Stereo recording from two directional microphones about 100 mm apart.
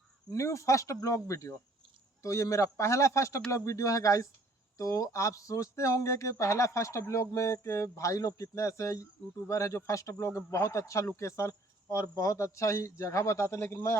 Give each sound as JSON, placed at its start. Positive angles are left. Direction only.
{"t": 0.3, "sound": "a man's voice", "side_deg": 30}